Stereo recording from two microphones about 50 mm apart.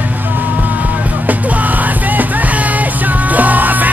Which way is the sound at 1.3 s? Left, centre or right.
Right.